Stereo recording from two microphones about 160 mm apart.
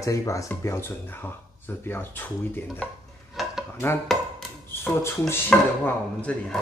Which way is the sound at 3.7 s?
15° left (ahead or behind).